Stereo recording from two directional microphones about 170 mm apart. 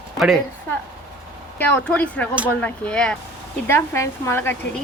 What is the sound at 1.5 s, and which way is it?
A woman's voice, 10° left (ahead or behind).